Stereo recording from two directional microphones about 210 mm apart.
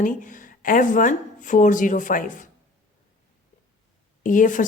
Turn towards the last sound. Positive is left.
turn(degrees=40)  # may be behind; listen again after turning